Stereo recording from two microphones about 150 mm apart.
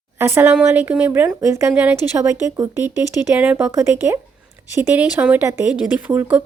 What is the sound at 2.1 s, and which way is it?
Speech, 20° right (ahead or behind).